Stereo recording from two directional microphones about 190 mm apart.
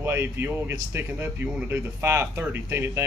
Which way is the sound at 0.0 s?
15° right (ahead or behind).